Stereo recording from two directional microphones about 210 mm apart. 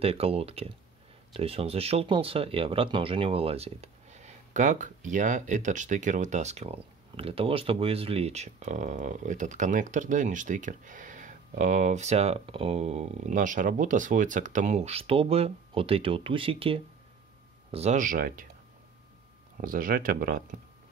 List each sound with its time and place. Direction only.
0.0 s speech: 30° right (ahead or behind)
19.5 s speech: 40° right (ahead or behind)